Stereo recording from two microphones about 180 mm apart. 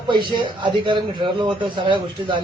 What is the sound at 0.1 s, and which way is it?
A man's voice, 25° right (ahead or behind).